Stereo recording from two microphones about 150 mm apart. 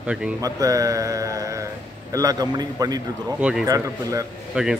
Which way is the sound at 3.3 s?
5° right (ahead or behind).